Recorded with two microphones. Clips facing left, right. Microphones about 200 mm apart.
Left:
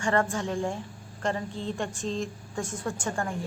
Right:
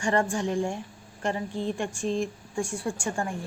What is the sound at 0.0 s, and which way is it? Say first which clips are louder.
A woman's voice: right 1 dB; 15° right (ahead or behind).